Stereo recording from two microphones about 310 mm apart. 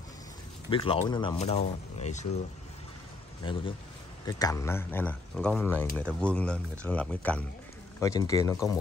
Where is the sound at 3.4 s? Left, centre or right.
Centre.